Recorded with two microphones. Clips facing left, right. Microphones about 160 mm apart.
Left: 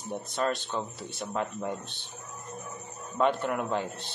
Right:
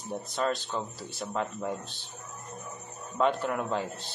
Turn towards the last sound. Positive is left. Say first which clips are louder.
# left 1 dB
turn(degrees=0)  # may be behind; listen again after turning